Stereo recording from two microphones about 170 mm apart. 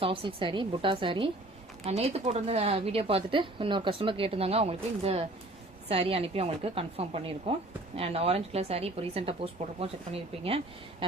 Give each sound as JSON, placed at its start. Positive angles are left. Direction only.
{"t": 0.0, "sound": "speech", "side_deg": -30}